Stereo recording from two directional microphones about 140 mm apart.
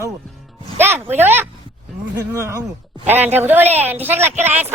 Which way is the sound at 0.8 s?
15° right (ahead or behind).